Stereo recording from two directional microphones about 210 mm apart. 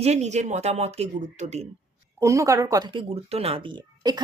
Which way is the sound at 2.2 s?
15° right (ahead or behind).